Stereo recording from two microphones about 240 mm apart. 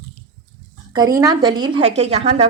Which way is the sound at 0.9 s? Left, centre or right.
Centre.